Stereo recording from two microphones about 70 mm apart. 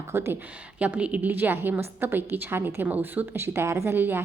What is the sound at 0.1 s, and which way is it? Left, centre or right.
Speech, right.